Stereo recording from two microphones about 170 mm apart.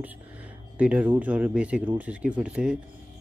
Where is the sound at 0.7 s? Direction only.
5° right (ahead or behind).